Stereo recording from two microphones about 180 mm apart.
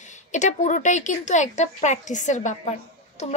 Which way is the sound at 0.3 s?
40° left (ahead or behind).